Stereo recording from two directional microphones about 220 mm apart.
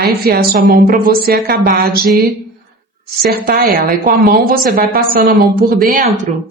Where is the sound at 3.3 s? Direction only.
45° right (ahead or behind).